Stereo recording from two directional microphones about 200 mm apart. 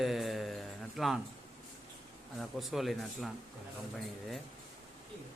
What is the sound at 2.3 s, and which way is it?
Speech, centre (ahead or behind).